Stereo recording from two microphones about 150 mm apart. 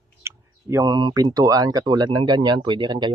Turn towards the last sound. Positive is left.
turn(degrees=-30)  # may be behind; listen again after turning